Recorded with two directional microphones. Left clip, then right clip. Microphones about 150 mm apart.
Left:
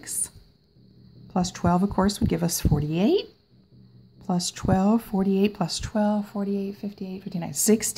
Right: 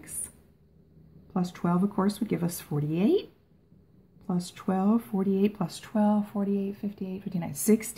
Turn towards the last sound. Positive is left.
turn(degrees=45)  # may be behind; listen again after turning